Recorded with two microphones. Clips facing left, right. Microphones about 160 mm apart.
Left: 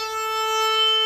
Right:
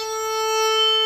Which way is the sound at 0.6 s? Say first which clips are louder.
Right 4 dB; 35° right (ahead or behind).